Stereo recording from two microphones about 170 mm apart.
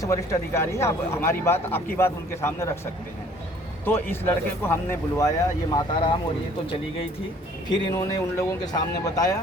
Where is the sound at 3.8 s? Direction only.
10° left (ahead or behind).